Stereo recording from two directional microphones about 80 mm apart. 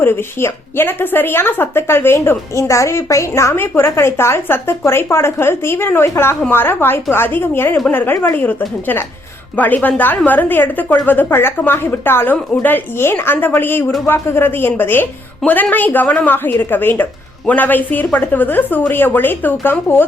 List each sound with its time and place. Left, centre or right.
0.0 s a woman's voice: left